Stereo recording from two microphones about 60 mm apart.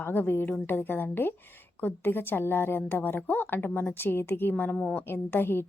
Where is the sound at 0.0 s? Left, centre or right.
Left.